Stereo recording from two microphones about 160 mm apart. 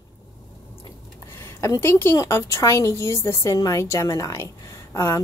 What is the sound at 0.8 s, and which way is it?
A woman's voice, 15° left (ahead or behind).